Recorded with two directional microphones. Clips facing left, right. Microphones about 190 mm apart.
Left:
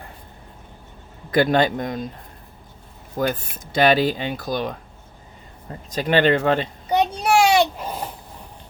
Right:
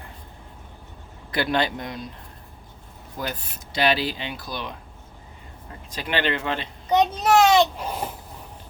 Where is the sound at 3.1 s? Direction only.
50° left (ahead or behind).